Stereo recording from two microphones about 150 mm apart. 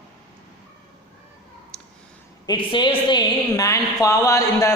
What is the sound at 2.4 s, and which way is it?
A man's voice, 30° left (ahead or behind).